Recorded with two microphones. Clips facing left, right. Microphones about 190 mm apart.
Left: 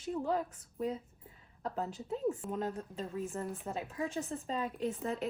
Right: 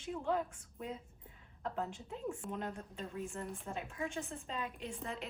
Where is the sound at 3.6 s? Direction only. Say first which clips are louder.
Left 4 dB; 35° left (ahead or behind).